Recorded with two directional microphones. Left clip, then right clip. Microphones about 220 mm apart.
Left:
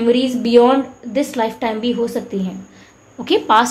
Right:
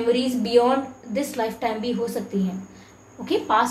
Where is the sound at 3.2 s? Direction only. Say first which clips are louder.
Left 7 dB; 45° left (ahead or behind).